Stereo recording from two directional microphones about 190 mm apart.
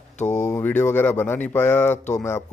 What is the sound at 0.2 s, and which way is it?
Speech, 40° left (ahead or behind).